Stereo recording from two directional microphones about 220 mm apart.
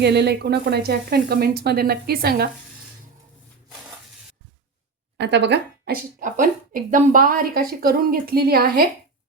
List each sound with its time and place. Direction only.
0.0 s a woman's voice: 50° right (ahead or behind)
5.1 s a woman's voice: 50° right (ahead or behind)